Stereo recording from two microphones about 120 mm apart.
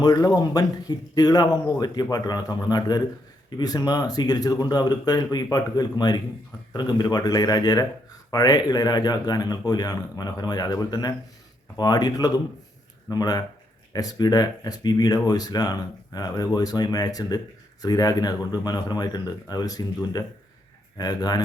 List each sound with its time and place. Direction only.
0.0 s speech: 35° left (ahead or behind)